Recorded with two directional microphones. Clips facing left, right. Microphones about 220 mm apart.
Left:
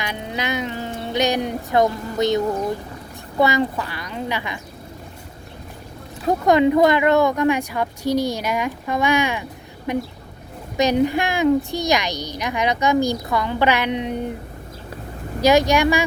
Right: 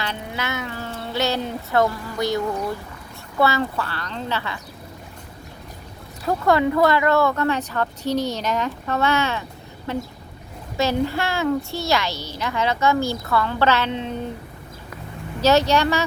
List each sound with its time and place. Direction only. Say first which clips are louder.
0.0 s speech: left 2 dB; 15° left (ahead or behind)
6.2 s speech: left 3 dB; 20° left (ahead or behind)
15.4 s speech: left 2 dB; 15° left (ahead or behind)